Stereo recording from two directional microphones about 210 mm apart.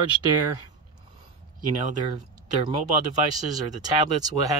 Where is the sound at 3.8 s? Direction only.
20° right (ahead or behind).